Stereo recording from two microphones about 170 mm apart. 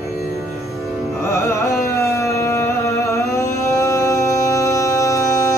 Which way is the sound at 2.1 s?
15° left (ahead or behind).